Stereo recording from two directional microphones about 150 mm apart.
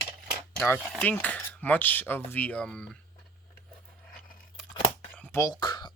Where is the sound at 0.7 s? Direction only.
15° left (ahead or behind).